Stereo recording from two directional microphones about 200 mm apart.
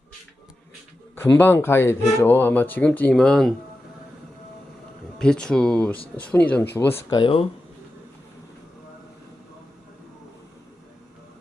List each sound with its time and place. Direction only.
1.1 s speech: 10° left (ahead or behind)
5.1 s speech: 5° left (ahead or behind); by 7.4 s 25° left (ahead or behind)